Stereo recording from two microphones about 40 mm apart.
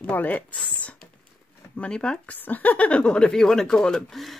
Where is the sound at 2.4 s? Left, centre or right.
Left.